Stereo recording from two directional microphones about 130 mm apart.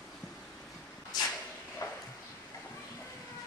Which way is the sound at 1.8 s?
25° left (ahead or behind).